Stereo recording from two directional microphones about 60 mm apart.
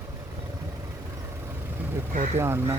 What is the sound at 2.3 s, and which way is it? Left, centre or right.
Speech, right.